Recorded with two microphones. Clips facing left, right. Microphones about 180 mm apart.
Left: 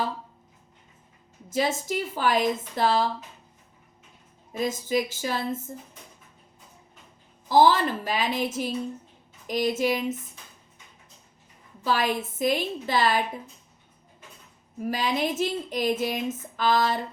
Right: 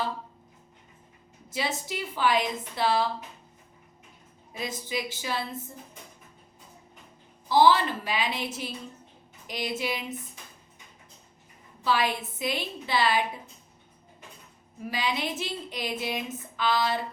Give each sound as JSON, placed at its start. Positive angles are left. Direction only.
{"t": 1.5, "sound": "speech", "side_deg": 45}
{"t": 4.5, "sound": "speech", "side_deg": 45}
{"t": 7.4, "sound": "speech", "side_deg": 45}
{"t": 11.8, "sound": "speech", "side_deg": 45}
{"t": 14.8, "sound": "speech", "side_deg": 45}